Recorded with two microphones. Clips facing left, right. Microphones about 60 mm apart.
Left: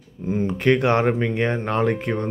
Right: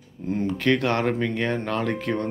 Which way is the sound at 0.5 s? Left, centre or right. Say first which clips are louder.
Left 4 dB; left.